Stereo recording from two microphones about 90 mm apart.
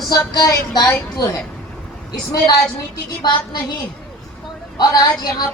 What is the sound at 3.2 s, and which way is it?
Speech, 60° left (ahead or behind).